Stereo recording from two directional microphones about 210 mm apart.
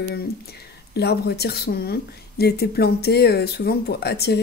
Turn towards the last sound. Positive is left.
turn(degrees=50)  # may be behind; listen again after turning